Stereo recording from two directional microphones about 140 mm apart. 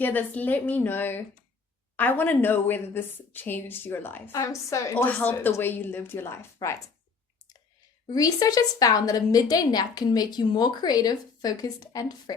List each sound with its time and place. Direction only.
0.0 s a woman's voice: 15° left (ahead or behind)
8.1 s a woman's voice: 25° left (ahead or behind)